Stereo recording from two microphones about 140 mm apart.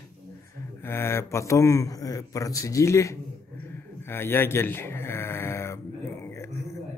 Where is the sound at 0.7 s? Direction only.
15° left (ahead or behind).